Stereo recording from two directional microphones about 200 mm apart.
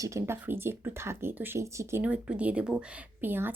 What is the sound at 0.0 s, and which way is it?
Speech, 15° right (ahead or behind).